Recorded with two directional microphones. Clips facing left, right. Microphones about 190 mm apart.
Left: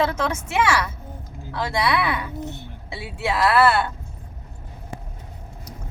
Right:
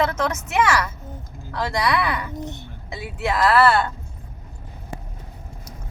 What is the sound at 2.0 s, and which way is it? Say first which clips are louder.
A child's voice: even; 5° left (ahead or behind).